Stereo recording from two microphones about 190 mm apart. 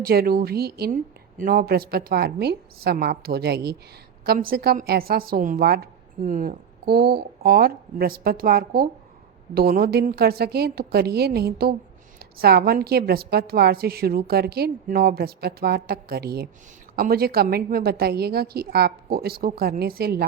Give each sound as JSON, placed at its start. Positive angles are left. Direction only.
{"t": 0.0, "sound": "a woman's voice", "side_deg": -55}